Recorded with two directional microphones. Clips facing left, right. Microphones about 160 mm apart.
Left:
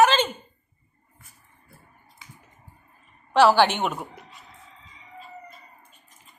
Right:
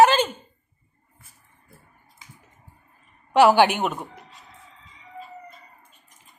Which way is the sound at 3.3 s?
15° right (ahead or behind).